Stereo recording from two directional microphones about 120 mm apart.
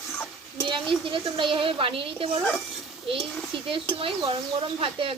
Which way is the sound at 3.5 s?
45° right (ahead or behind).